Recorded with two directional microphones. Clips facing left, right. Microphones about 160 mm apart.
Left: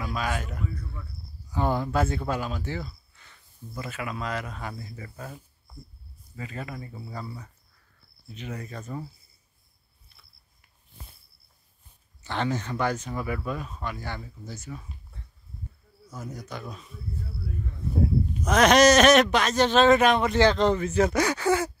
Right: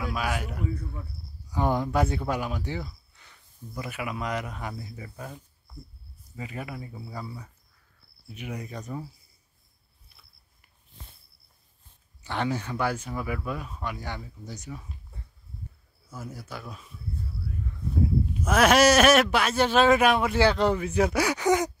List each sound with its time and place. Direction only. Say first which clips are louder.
0.0 s a man's voice: even; 10° right (ahead or behind)
6.3 s speech: even; 15° right (ahead or behind)
12.2 s speech: even; 10° right (ahead or behind)
16.1 s speech: left 1 dB; 5° right (ahead or behind)
18.3 s speech: left 1 dB; 5° right (ahead or behind)